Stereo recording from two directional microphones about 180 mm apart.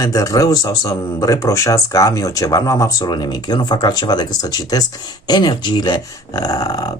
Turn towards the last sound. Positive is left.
turn(degrees=20)  # may be behind; listen again after turning